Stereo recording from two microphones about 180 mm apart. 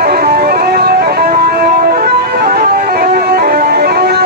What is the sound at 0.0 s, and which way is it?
Music, 55° right (ahead or behind).